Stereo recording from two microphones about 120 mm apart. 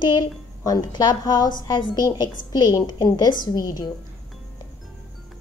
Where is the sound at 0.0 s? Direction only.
35° left (ahead or behind).